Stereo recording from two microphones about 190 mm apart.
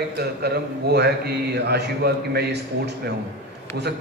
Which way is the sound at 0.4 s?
60° right (ahead or behind).